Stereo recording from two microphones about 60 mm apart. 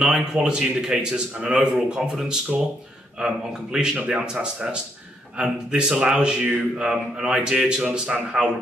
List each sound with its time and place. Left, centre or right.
0.0 s speech: centre